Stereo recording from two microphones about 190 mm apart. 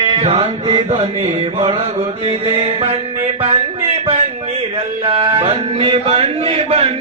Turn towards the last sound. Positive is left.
turn(degrees=-30)  # may be behind; listen again after turning